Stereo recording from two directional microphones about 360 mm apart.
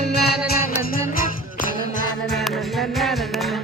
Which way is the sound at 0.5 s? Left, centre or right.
Left.